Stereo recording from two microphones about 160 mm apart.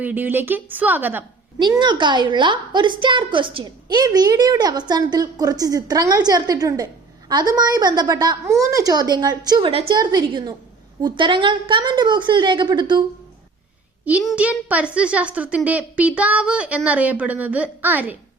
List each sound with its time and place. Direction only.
0.0 s a woman's voice: 10° right (ahead or behind)
1.5 s a woman's voice: 25° right (ahead or behind)
14.0 s a woman's voice: 10° right (ahead or behind)